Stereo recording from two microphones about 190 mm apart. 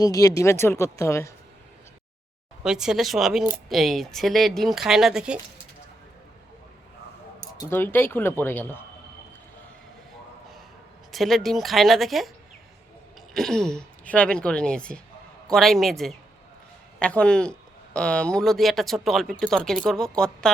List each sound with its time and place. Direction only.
0.0 s speech: 20° left (ahead or behind)
2.6 s speech: 5° right (ahead or behind)
7.6 s speech: 10° left (ahead or behind)
11.1 s speech: centre (ahead or behind)
13.3 s speech: centre (ahead or behind)